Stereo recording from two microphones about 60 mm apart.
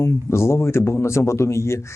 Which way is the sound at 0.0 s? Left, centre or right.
Left.